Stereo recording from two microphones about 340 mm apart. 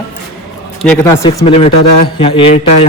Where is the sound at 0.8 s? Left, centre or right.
Centre.